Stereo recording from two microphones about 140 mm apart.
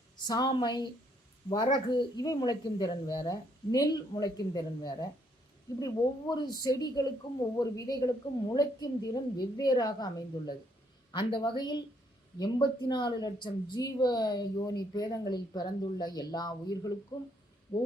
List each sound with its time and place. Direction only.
0.2 s a woman's voice: 30° left (ahead or behind)